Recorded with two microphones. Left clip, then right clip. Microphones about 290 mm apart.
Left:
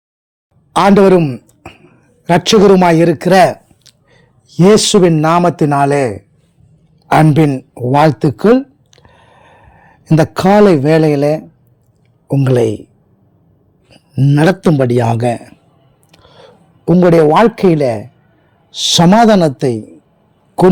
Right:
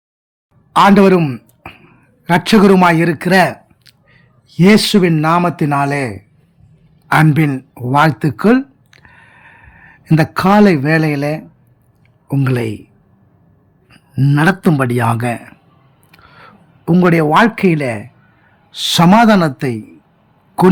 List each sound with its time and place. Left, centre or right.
0.7 s a man's voice: centre
7.1 s a sound: centre
10.6 s speech: centre
13.9 s speech: centre
16.1 s a sound: centre
17.3 s speech: centre